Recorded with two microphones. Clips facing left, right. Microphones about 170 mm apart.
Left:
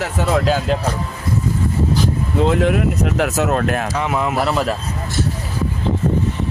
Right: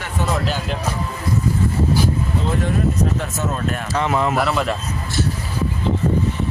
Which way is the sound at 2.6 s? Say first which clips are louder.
Left 3 dB; 80° left.